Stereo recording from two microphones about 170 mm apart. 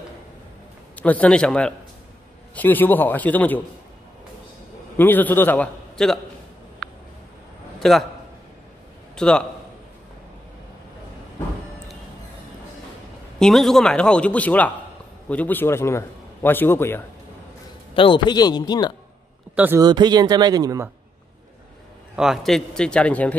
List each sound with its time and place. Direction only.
0.9 s a man's voice: 10° left (ahead or behind)
4.9 s a man's voice: 10° left (ahead or behind)
6.8 s a sound: centre (ahead or behind)
7.8 s a man's voice: centre (ahead or behind)
9.1 s a man's voice: 5° left (ahead or behind)
13.4 s a man's voice: centre (ahead or behind)
17.9 s speech: 30° left (ahead or behind)
19.5 s speech: 10° right (ahead or behind)
19.8 s speech: 25° right (ahead or behind)
22.1 s speech: centre (ahead or behind)